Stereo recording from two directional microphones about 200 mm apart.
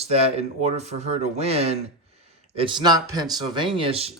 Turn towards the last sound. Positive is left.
turn(degrees=-30)  # may be behind; listen again after turning